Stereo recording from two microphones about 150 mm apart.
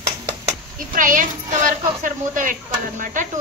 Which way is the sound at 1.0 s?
65° right (ahead or behind).